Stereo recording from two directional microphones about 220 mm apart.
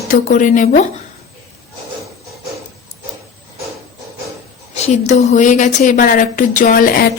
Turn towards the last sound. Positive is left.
turn(degrees=40)  # may be behind; listen again after turning